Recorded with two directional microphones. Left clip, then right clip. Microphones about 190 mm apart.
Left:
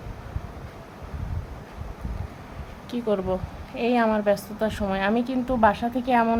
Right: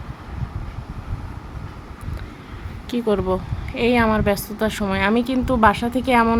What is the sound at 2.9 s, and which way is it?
A woman's voice, 15° right (ahead or behind).